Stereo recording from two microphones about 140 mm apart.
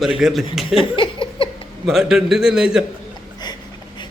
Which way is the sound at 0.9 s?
40° left (ahead or behind).